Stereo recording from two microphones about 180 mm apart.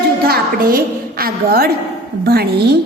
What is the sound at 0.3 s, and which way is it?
A woman's voice, 55° right (ahead or behind).